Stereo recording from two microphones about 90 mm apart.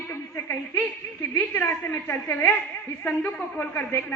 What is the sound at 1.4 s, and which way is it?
A woman's voice, 25° left (ahead or behind).